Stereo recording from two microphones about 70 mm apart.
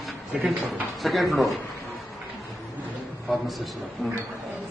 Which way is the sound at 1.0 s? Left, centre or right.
Centre.